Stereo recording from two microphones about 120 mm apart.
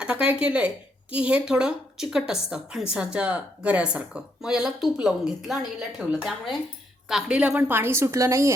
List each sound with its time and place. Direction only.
0.0 s a woman's voice: 10° right (ahead or behind)